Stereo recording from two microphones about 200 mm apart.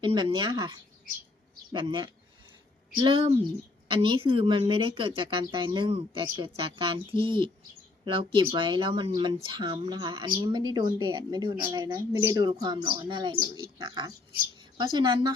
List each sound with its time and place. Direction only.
0.0 s speech: 25° right (ahead or behind)